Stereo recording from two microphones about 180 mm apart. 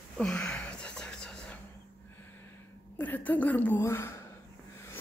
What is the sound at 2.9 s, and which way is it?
A woman's voice, 10° left (ahead or behind).